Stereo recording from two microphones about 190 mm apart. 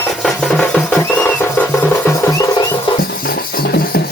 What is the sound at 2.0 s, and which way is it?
Music, 15° left (ahead or behind).